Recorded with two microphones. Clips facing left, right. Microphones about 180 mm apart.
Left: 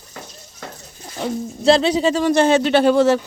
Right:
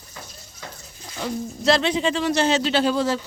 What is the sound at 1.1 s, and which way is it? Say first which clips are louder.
Speech: left 4 dB; 30° left (ahead or behind).